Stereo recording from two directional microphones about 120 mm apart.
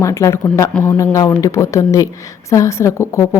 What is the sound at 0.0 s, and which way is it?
A woman's voice, 25° left (ahead or behind).